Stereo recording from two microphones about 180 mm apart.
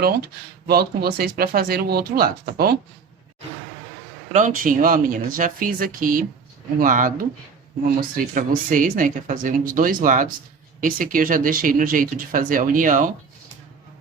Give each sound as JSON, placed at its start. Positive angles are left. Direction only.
{"t": 0.7, "sound": "speech", "side_deg": -60}
{"t": 4.3, "sound": "speech", "side_deg": -45}